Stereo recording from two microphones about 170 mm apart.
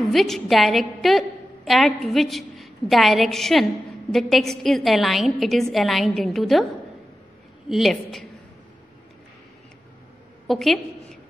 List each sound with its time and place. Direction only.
0.1 s a woman's voice: centre (ahead or behind)
10.4 s a woman's voice: centre (ahead or behind)